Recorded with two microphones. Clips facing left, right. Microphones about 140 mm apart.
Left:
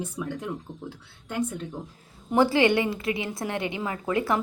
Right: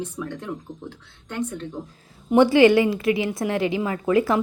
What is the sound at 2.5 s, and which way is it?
A woman's voice, 25° left (ahead or behind).